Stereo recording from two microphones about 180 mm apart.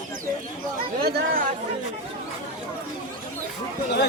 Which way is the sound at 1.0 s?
55° right (ahead or behind).